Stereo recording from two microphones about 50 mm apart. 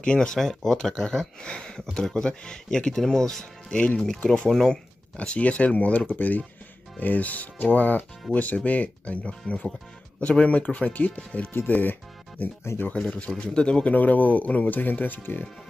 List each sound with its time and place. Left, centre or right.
0.0 s speech: centre
3.7 s speech: left
4.5 s speech: centre
5.1 s speech: left
12.7 s speech: left
13.3 s speech: centre
13.8 s speech: left